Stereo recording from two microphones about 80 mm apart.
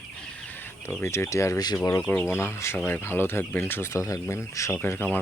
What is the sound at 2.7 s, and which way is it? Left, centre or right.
Speech, left.